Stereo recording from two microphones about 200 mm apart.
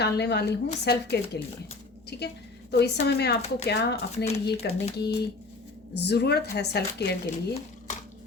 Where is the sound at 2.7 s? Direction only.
55° left (ahead or behind).